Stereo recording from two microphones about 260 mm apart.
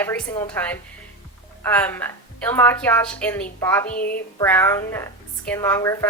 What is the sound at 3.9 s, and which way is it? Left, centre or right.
Speech, left.